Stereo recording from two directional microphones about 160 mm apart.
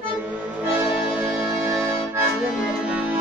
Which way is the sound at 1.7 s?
20° right (ahead or behind).